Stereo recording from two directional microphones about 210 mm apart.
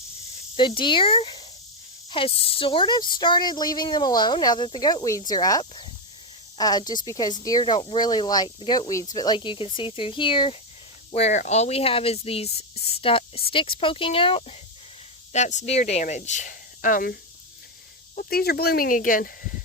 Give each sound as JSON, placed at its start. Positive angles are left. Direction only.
{"t": 0.5, "sound": "speech", "side_deg": 25}